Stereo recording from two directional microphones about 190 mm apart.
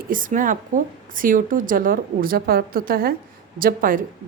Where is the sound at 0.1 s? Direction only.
45° right (ahead or behind).